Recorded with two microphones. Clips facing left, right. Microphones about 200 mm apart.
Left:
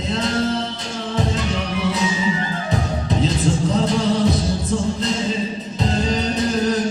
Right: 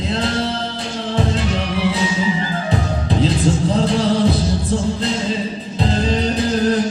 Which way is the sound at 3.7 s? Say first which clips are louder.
Right 2 dB; 30° right (ahead or behind).